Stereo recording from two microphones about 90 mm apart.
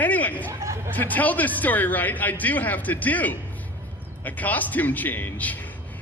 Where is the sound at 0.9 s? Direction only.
20° left (ahead or behind).